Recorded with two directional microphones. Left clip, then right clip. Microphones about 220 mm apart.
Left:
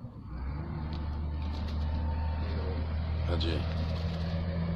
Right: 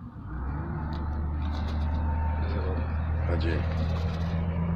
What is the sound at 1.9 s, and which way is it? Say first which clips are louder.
Vehicle: right 6 dB; 50° left (ahead or behind).